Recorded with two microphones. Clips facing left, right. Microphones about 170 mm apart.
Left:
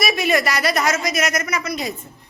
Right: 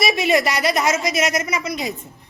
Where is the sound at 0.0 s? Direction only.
20° right (ahead or behind).